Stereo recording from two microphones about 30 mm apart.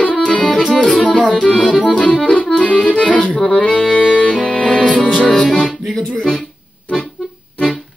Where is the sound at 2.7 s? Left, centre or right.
Left.